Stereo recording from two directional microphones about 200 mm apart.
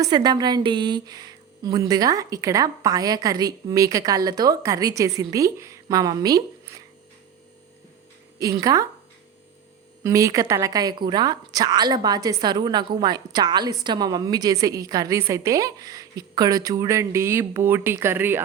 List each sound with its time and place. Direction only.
0.0 s a woman's voice: 20° right (ahead or behind)
8.5 s a woman's voice: 15° right (ahead or behind)
10.0 s a woman's voice: 15° right (ahead or behind)